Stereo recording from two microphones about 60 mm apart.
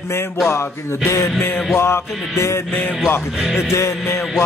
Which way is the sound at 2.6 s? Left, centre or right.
Left.